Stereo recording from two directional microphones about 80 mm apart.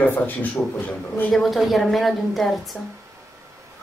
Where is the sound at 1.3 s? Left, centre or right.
Centre.